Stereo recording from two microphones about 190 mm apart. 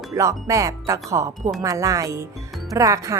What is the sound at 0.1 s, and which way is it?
A woman's voice, 15° right (ahead or behind).